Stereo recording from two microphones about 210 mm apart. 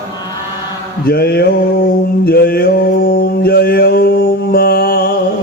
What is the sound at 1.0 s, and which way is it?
Mantra, 45° left (ahead or behind).